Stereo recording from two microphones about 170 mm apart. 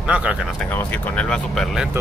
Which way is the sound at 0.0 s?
5° right (ahead or behind).